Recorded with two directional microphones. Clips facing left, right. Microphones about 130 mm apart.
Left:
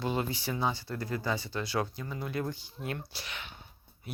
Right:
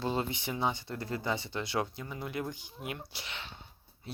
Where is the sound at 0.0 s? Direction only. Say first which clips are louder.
Left 1 dB; 25° right (ahead or behind).